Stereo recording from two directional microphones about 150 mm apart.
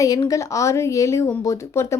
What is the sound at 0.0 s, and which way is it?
Speech, 25° left (ahead or behind).